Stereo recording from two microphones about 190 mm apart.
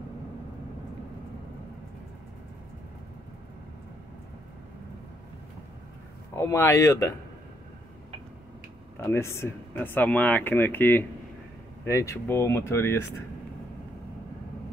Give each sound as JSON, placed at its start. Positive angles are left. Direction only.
{"t": 6.3, "sound": "speech", "side_deg": 15}
{"t": 8.9, "sound": "speech", "side_deg": 15}